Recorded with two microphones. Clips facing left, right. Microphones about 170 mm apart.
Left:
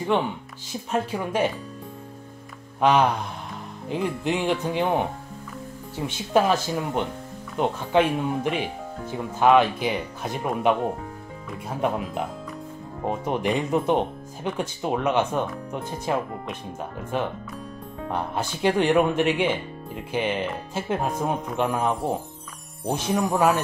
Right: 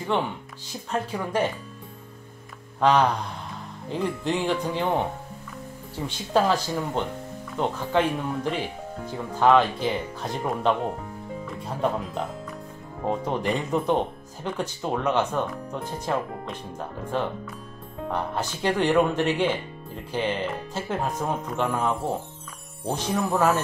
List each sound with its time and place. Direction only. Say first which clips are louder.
0.9 s speech: left 1 dB; 15° left (ahead or behind)
2.8 s speech: left 1 dB; 15° left (ahead or behind)
18.1 s speech: left 1 dB; 15° left (ahead or behind)